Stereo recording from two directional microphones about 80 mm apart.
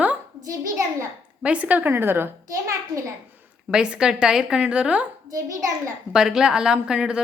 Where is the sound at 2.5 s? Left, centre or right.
Right.